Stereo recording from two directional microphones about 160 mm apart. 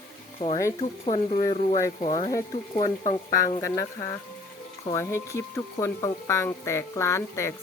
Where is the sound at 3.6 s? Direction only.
20° left (ahead or behind).